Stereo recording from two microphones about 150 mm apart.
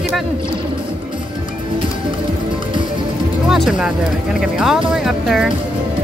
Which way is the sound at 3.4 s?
Centre (ahead or behind).